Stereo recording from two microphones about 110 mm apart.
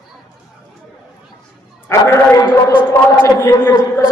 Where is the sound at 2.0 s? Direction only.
20° left (ahead or behind).